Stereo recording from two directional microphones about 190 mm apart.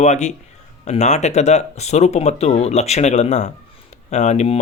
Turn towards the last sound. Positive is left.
turn(degrees=35)  # may be behind; listen again after turning